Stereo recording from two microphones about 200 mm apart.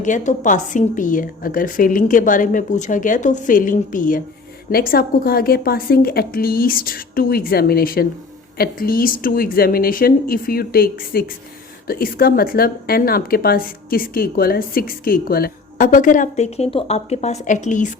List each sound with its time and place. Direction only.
0.0 s a woman's voice: 40° left (ahead or behind)